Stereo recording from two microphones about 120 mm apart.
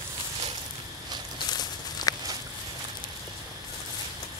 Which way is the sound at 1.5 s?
35° left (ahead or behind).